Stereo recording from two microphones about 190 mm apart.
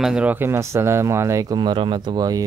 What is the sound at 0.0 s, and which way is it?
Speech, 5° right (ahead or behind).